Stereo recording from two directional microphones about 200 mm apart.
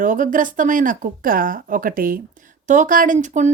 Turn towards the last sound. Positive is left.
turn(degrees=-40)  # may be behind; listen again after turning